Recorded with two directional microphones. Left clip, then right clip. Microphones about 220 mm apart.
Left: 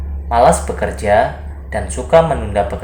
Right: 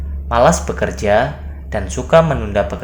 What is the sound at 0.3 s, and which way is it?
Speech, 45° right (ahead or behind).